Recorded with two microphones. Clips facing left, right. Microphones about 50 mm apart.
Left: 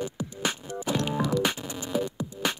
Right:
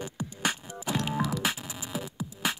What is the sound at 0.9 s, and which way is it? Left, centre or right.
Music, centre.